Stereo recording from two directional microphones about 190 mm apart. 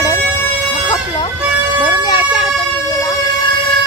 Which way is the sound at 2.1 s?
25° left (ahead or behind).